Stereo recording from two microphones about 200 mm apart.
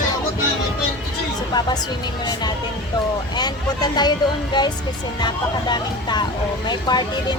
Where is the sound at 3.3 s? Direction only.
20° left (ahead or behind).